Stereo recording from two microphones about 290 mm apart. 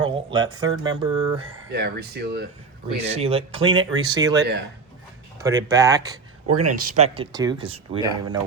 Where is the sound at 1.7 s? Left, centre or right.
Right.